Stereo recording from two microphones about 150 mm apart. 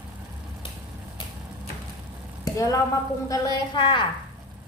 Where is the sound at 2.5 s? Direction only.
20° left (ahead or behind).